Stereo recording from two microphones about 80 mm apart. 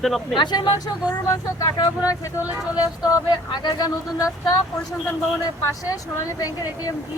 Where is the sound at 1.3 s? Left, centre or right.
Left.